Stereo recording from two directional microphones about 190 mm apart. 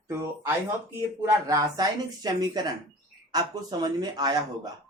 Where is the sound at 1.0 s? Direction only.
15° right (ahead or behind).